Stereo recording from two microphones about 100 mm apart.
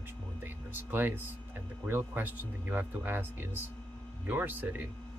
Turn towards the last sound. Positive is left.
turn(degrees=-20)  # may be behind; listen again after turning